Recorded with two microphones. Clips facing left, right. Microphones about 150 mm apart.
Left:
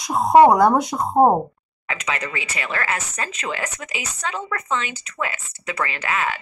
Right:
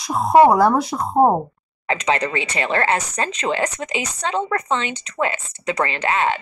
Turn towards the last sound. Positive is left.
turn(degrees=-30)  # may be behind; listen again after turning